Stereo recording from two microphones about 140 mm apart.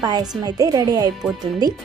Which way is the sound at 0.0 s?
30° right (ahead or behind).